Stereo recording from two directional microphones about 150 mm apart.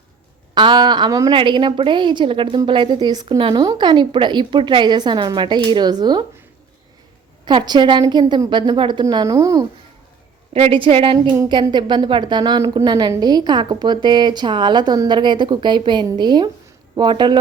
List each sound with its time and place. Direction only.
0.5 s a woman's voice: 30° right (ahead or behind)
7.4 s a woman's voice: 30° right (ahead or behind)
10.5 s a woman's voice: 40° right (ahead or behind)